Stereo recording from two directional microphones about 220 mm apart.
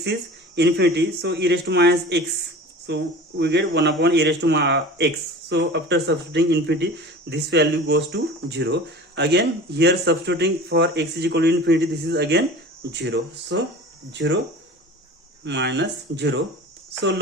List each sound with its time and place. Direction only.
0.0 s speech: 50° right (ahead or behind)
15.4 s speech: 55° right (ahead or behind)